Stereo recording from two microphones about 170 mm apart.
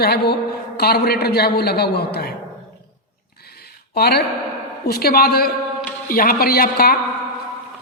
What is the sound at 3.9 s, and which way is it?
A man's voice, 70° left (ahead or behind).